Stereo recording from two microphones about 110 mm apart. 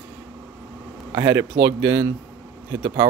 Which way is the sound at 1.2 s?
25° right (ahead or behind).